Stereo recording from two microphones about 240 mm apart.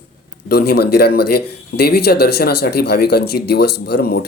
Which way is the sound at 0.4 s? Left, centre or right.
Left.